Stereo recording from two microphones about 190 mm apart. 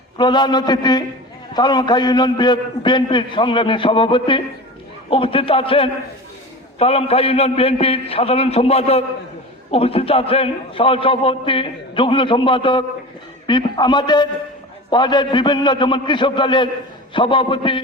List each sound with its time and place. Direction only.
0.2 s a man's voice: 25° left (ahead or behind)